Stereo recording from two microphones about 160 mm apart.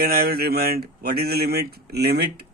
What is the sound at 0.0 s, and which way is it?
Speech, 75° right (ahead or behind).